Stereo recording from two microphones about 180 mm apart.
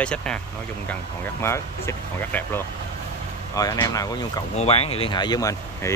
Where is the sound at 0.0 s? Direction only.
5° left (ahead or behind).